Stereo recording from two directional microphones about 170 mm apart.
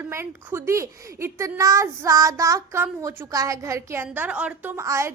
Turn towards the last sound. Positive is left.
turn(degrees=-15)  # may be behind; listen again after turning